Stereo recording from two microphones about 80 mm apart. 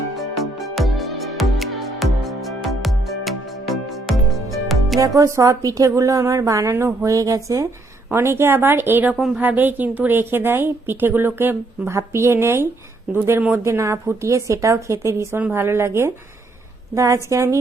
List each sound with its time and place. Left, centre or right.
0.2 s music: centre
4.9 s a woman's voice: right
8.1 s a woman's voice: right
9.1 s a woman's voice: centre
9.4 s a woman's voice: right
15.4 s a woman's voice: right